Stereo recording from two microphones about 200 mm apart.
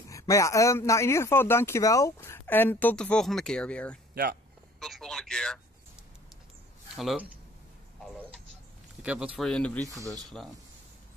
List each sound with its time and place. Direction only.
0.1 s a man's voice: 15° left (ahead or behind)
4.1 s speech: 50° right (ahead or behind)
4.7 s speech: centre (ahead or behind)
7.0 s speech: centre (ahead or behind)
9.0 s speech: 5° right (ahead or behind)